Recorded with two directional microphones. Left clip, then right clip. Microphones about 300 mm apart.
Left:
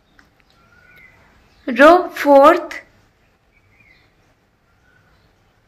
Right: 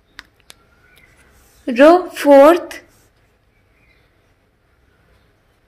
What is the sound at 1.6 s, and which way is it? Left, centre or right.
Speech, centre.